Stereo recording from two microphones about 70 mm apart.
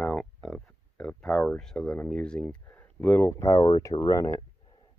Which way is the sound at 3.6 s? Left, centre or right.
Left.